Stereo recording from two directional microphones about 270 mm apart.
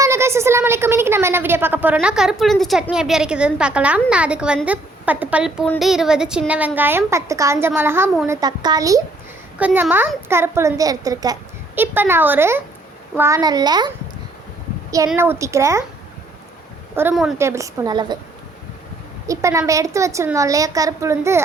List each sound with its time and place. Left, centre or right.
0.0 s a woman's voice: centre
16.9 s a child's voice: centre
19.3 s a child's voice: centre